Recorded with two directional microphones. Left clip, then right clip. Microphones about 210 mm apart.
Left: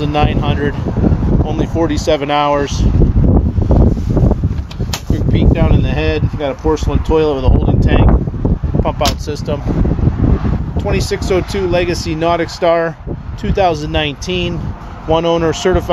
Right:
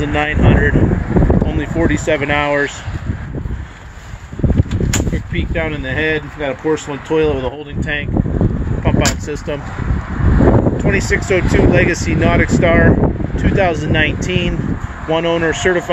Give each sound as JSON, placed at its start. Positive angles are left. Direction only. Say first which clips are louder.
{"t": 0.0, "sound": "speech", "louder": "even", "side_deg": 20}
{"t": 1.8, "sound": "speech", "louder": "left 1 dB", "side_deg": 25}
{"t": 5.3, "sound": "speech", "louder": "left 6 dB", "side_deg": 25}
{"t": 10.9, "sound": "speech", "louder": "left 2 dB", "side_deg": 30}